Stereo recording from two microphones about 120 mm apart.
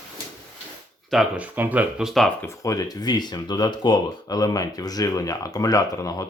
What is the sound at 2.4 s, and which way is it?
Speech, 25° left (ahead or behind).